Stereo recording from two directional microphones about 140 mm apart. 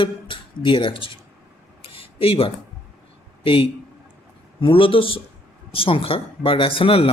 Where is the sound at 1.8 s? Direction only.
40° left (ahead or behind).